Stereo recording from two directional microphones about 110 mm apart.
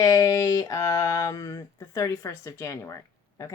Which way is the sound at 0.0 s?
30° left (ahead or behind).